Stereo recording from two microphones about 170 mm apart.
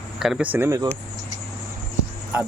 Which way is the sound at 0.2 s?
5° right (ahead or behind).